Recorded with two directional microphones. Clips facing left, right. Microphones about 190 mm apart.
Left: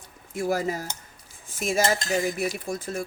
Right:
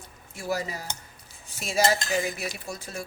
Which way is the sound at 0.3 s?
50° left (ahead or behind).